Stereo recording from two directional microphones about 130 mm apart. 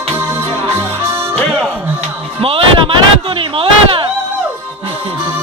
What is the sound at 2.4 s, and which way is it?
Music, 45° right (ahead or behind).